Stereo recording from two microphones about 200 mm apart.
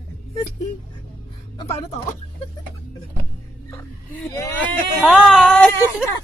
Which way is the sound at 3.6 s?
15° left (ahead or behind).